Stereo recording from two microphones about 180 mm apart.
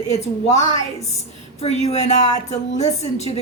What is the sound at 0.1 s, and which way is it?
Speech, 40° left (ahead or behind).